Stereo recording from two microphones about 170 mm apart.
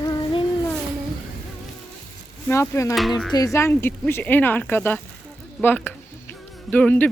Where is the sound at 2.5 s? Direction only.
15° left (ahead or behind).